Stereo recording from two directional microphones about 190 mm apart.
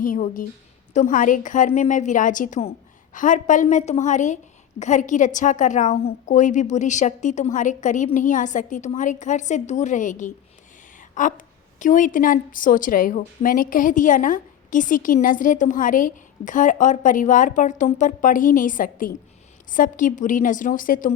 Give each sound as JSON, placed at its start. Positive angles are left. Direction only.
{"t": 0.0, "sound": "a woman's voice", "side_deg": 45}